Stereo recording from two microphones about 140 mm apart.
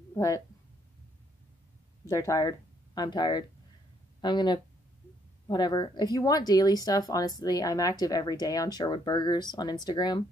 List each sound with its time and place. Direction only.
0.1 s speech: 25° left (ahead or behind)
2.0 s speech: 20° left (ahead or behind)